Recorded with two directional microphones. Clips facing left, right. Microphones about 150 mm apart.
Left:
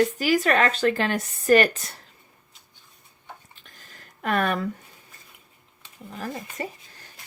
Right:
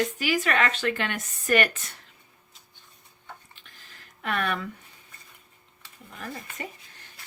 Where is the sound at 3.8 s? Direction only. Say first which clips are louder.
Left 6 dB; 45° left (ahead or behind).